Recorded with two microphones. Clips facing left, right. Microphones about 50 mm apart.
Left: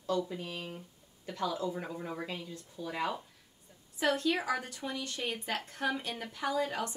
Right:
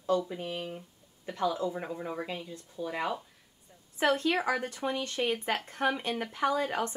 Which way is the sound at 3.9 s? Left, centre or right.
Right.